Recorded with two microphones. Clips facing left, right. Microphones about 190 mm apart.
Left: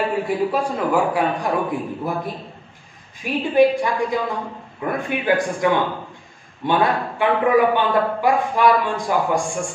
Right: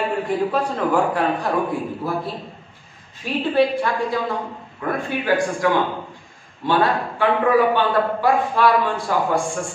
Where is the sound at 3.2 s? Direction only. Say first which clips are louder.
Left 3 dB; 15° left (ahead or behind).